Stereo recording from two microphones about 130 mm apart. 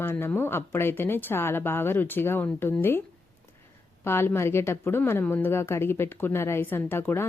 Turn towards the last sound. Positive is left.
turn(degrees=15)  # may be behind; listen again after turning